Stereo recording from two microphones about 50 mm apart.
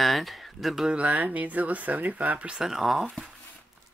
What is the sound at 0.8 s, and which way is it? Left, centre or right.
Speech, right.